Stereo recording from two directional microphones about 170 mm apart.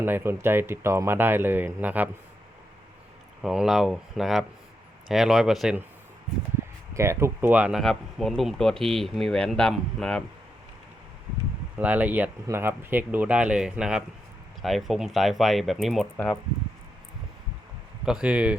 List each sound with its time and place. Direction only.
0.0 s speech: 15° right (ahead or behind)
3.4 s speech: 5° right (ahead or behind)
6.9 s speech: 15° right (ahead or behind); by 10.2 s 5° left (ahead or behind)
11.8 s speech: 10° right (ahead or behind)
18.0 s speech: 5° right (ahead or behind)